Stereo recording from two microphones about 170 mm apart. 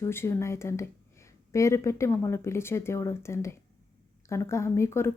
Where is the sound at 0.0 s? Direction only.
15° left (ahead or behind).